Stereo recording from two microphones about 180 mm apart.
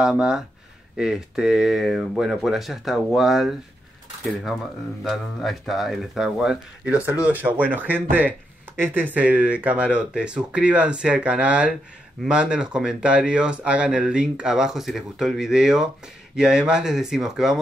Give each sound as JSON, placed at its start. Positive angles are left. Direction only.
{"t": 0.0, "sound": "speech", "side_deg": -5}
{"t": 5.0, "sound": "speech", "side_deg": 0}